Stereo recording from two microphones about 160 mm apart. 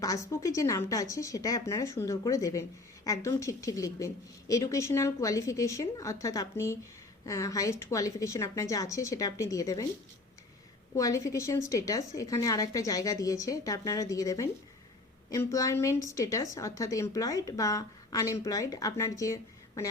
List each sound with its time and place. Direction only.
0.0 s a woman's voice: 20° left (ahead or behind)
10.9 s a woman's voice: 20° left (ahead or behind)